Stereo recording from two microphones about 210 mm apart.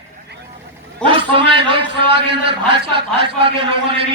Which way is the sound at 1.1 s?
25° right (ahead or behind).